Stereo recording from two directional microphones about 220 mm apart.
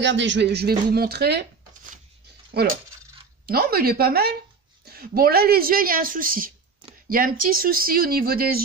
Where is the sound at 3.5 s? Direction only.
45° right (ahead or behind).